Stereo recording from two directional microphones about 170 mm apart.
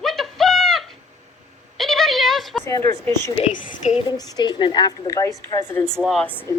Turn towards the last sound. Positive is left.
turn(degrees=10)  # may be behind; listen again after turning